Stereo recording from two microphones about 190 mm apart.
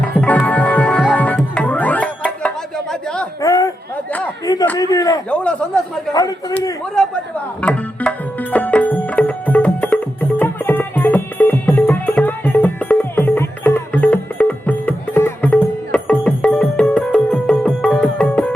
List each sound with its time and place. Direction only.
0.1 s music: 10° left (ahead or behind)
2.9 s a sound: 5° left (ahead or behind)
3.4 s a sound: 20° left (ahead or behind)
5.3 s a man's voice: 5° left (ahead or behind)
6.9 s a man's voice: 5° left (ahead or behind)
7.6 s music: 5° left (ahead or behind)